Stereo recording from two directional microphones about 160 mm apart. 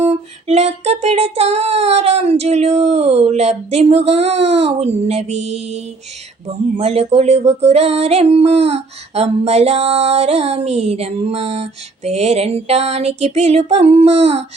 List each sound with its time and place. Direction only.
0.0 s female singing: 40° right (ahead or behind)